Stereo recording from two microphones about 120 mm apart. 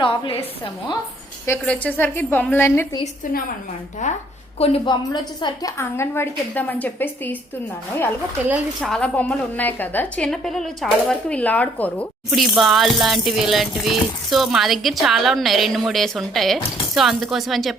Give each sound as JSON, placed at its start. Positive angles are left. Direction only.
{"t": 0.0, "sound": "a woman's voice", "side_deg": 45}
{"t": 1.6, "sound": "a woman's voice", "side_deg": 10}
{"t": 4.0, "sound": "a woman's voice", "side_deg": 80}
{"t": 4.5, "sound": "a woman's voice", "side_deg": 55}
{"t": 4.9, "sound": "a woman's voice", "side_deg": 40}
{"t": 5.7, "sound": "a woman's voice", "side_deg": 20}
{"t": 8.8, "sound": "a woman's voice", "side_deg": 5}
{"t": 12.3, "sound": "speech", "side_deg": 0}